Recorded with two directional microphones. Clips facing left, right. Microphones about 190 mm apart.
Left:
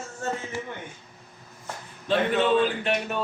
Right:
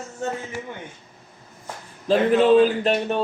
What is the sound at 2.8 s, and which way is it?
Music, 30° right (ahead or behind).